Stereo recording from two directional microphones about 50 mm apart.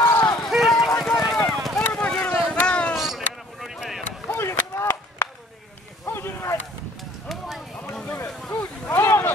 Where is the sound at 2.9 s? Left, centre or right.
Centre.